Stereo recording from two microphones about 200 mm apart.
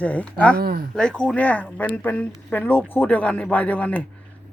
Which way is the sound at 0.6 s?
45° right (ahead or behind).